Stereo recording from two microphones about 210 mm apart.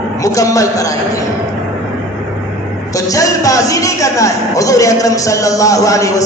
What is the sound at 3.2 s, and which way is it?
Speech, 15° left (ahead or behind).